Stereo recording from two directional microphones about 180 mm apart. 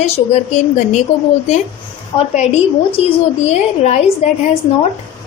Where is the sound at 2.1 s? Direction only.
40° left (ahead or behind).